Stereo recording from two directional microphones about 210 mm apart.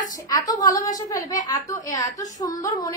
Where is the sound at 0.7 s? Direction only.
15° left (ahead or behind).